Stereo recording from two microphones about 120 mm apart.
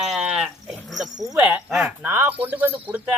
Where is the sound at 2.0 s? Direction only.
20° right (ahead or behind).